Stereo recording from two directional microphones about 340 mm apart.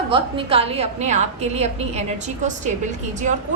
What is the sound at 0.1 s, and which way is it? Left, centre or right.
A woman's voice, centre.